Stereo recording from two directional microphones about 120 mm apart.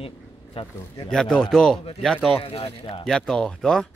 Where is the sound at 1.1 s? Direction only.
5° left (ahead or behind).